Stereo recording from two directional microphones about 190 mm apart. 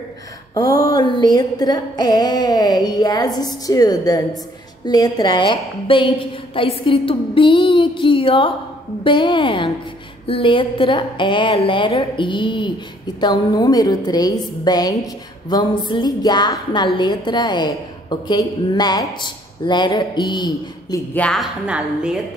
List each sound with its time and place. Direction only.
0.8 s a woman's voice: 20° left (ahead or behind)
21.1 s a woman's voice: 5° left (ahead or behind)